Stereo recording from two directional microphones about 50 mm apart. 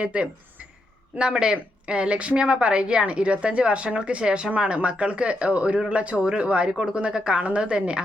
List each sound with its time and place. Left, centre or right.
0.0 s a woman's voice: right